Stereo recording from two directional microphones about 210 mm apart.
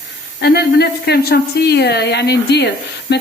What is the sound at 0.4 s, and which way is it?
Speech, 50° left (ahead or behind).